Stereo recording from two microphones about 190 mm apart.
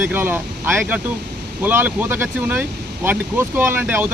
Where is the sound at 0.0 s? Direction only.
10° right (ahead or behind).